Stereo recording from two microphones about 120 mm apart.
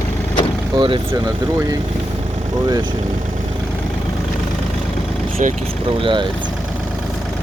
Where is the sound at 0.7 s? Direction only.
45° right (ahead or behind).